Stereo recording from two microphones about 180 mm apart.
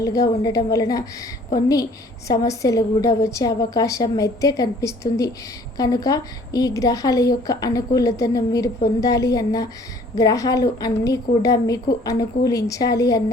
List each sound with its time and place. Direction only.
0.0 s a woman's voice: 20° left (ahead or behind)